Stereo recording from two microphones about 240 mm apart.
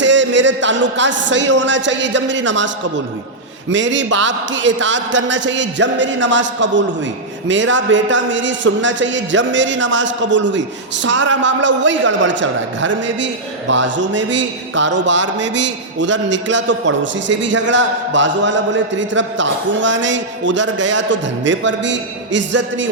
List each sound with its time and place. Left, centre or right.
0.0 s a man's voice: right
3.7 s a man's voice: right